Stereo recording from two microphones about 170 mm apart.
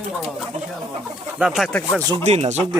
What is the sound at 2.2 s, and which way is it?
Speech, 40° right (ahead or behind).